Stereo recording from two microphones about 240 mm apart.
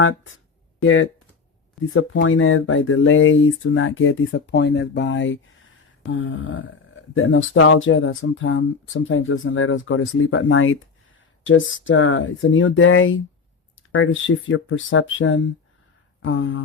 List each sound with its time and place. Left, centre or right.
0.8 s speech: left